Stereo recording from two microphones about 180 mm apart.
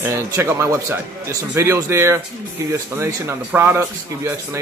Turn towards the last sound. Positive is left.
turn(degrees=-10)  # may be behind; listen again after turning